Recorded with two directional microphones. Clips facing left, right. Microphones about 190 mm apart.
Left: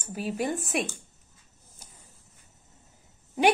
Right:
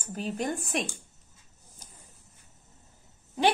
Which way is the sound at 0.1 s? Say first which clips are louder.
Left 2 dB; 5° left (ahead or behind).